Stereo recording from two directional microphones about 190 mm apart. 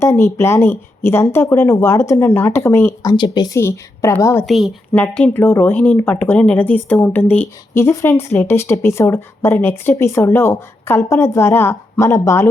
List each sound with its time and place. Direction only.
0.0 s speech: 15° left (ahead or behind)
4.4 s speech: centre (ahead or behind); by 12.5 s 15° left (ahead or behind)